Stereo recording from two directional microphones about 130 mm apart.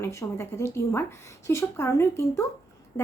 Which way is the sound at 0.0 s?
20° left (ahead or behind).